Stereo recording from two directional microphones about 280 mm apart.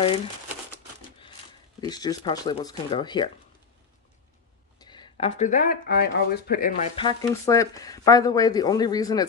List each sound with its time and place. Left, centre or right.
1.8 s speech: centre
4.7 s speech: centre; by 6.9 s left
7.0 s speech: centre